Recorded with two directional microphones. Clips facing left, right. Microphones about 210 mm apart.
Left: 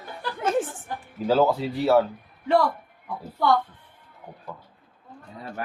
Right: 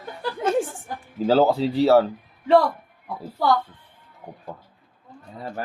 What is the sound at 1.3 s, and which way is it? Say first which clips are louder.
Speech: right 3 dB; 30° right (ahead or behind).